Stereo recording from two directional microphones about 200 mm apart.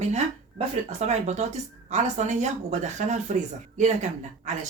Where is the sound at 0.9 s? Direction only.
35° right (ahead or behind).